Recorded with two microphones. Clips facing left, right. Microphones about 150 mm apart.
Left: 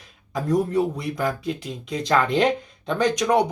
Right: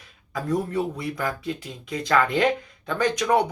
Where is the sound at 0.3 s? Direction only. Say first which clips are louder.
Left 4 dB; 20° left (ahead or behind).